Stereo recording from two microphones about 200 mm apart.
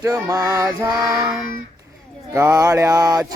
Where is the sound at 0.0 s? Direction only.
15° right (ahead or behind).